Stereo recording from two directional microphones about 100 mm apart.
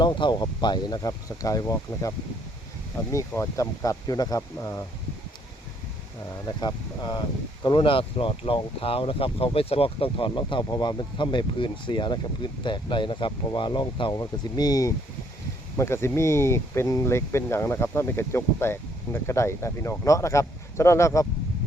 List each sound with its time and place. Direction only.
0.0 s speech: 50° left (ahead or behind); by 4.9 s 35° left (ahead or behind)
6.6 s speech: 45° left (ahead or behind)
7.6 s speech: 60° left (ahead or behind)
10.6 s speech: 45° left (ahead or behind)
15.8 s speech: 25° left (ahead or behind)